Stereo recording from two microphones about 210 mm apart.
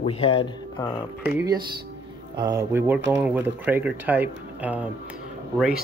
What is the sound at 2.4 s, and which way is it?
Speech, 15° right (ahead or behind).